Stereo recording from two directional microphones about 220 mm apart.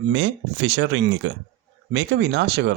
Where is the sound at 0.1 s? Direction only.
60° right (ahead or behind).